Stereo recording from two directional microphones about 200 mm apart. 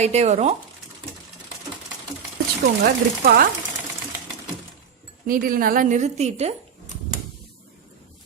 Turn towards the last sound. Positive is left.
turn(degrees=-35)  # may be behind; listen again after turning